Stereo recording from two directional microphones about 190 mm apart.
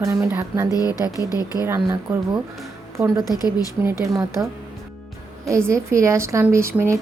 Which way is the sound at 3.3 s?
20° left (ahead or behind).